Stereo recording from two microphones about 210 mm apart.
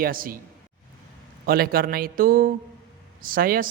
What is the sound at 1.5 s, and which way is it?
A man's voice, 45° right (ahead or behind).